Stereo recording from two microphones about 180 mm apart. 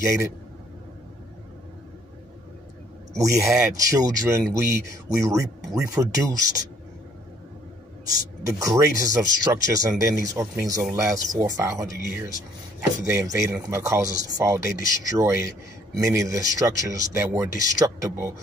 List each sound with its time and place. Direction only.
0.0 s speech: 15° right (ahead or behind)
3.2 s speech: 15° right (ahead or behind)
8.5 s speech: 20° right (ahead or behind)
13.0 s speech: 15° right (ahead or behind)